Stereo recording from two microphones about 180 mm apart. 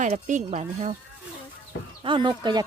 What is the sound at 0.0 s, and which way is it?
Speech, 45° right (ahead or behind).